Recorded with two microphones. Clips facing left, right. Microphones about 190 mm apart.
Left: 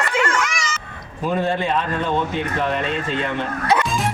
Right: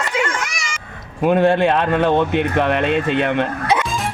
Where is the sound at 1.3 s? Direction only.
65° right (ahead or behind).